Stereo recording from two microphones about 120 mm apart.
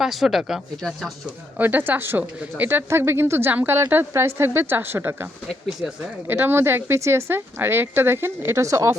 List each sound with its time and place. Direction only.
0.0 s speech: centre (ahead or behind)
1.5 s speech: 15° right (ahead or behind)